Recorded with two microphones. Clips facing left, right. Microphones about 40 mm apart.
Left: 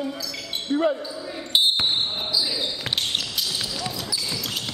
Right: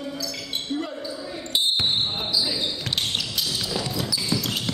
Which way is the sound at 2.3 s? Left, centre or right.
Centre.